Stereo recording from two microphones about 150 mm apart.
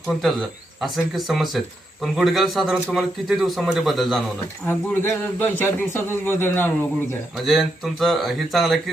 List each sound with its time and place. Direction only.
0.8 s speech: centre (ahead or behind)
4.6 s speech: 15° left (ahead or behind)
7.4 s speech: centre (ahead or behind)